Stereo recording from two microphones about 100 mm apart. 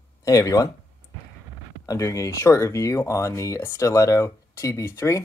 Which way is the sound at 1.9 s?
35° left (ahead or behind).